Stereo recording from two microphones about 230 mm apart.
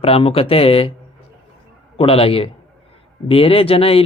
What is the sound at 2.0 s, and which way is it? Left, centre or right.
A man's voice, left.